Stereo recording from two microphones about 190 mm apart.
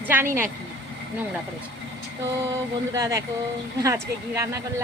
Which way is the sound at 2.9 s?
15° right (ahead or behind).